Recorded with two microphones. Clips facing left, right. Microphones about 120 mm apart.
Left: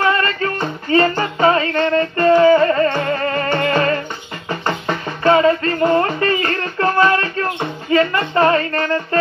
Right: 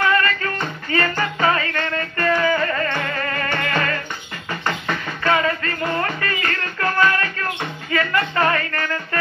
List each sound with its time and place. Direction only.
0.0 s music: 25° left (ahead or behind)